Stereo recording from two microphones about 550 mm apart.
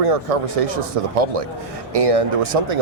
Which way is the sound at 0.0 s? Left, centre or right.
Right.